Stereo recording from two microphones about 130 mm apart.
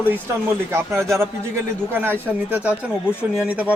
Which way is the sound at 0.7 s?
20° right (ahead or behind).